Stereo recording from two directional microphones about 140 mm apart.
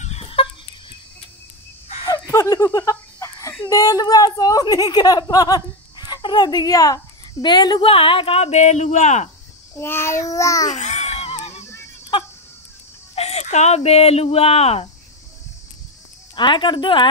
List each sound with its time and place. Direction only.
0.0 s fowl: 45° left (ahead or behind)
2.0 s a sound: 25° left (ahead or behind)
3.6 s speech: 25° left (ahead or behind); by 9.3 s 55° left (ahead or behind)
9.8 s speech: 15° left (ahead or behind)
10.7 s a sound: 55° left (ahead or behind)
13.1 s speech: 50° left (ahead or behind)
16.3 s speech: 35° left (ahead or behind)